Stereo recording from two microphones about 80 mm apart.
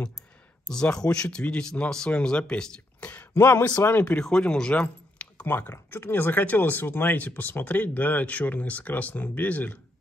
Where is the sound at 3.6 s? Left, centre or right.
Left.